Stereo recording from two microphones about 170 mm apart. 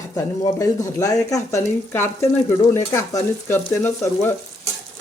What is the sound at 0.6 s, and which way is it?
Stir, 15° left (ahead or behind).